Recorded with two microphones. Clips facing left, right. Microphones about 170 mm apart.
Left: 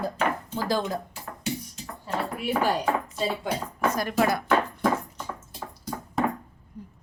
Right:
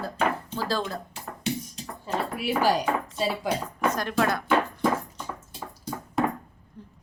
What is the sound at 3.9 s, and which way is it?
Speech, 10° left (ahead or behind).